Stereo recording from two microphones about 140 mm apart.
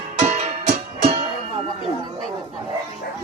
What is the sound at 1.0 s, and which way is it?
Music, 45° right (ahead or behind).